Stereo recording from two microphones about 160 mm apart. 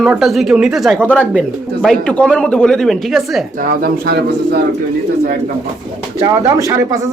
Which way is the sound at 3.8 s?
85° right.